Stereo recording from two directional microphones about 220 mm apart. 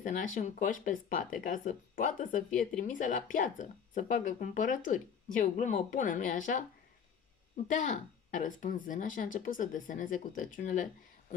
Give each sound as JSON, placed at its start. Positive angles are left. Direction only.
{"t": 0.0, "sound": "speech", "side_deg": 35}